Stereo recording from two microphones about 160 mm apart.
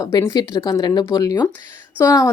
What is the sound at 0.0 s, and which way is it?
Speech, 25° left (ahead or behind).